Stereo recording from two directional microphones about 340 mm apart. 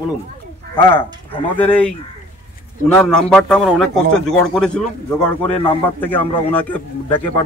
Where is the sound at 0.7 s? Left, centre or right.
Centre.